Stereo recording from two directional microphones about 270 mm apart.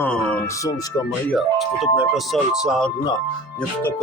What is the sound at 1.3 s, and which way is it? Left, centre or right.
Speech, centre.